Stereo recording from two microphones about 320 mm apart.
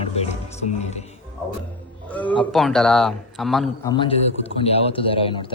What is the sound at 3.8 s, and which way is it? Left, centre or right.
A man's voice, centre.